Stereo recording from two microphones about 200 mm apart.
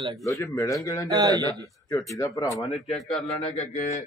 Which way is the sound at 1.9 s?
15° left (ahead or behind).